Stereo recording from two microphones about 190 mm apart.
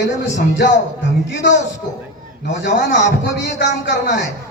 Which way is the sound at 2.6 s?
70° left (ahead or behind).